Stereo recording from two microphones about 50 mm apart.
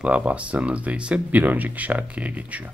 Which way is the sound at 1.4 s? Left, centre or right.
Right.